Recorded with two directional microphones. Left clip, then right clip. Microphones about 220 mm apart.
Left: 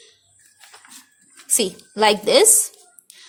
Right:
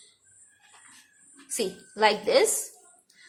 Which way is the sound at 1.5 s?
50° left (ahead or behind).